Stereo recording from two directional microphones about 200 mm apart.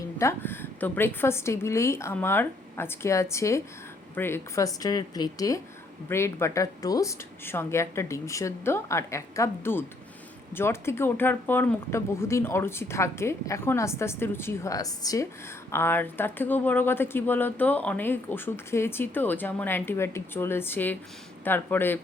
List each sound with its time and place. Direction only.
0.2 s speech: 10° left (ahead or behind)